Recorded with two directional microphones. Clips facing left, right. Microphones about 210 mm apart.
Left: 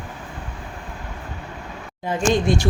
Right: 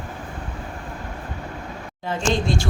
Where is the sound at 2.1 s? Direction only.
15° left (ahead or behind).